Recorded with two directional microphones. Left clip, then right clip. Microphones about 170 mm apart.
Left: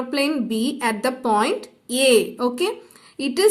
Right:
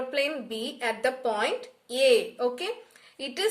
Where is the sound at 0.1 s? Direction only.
40° left (ahead or behind).